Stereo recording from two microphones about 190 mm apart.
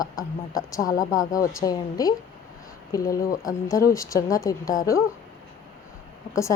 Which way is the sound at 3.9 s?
15° left (ahead or behind).